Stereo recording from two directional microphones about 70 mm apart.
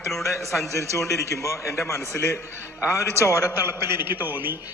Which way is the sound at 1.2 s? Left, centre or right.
Left.